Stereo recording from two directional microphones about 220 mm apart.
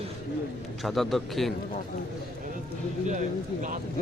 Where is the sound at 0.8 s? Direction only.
Centre (ahead or behind).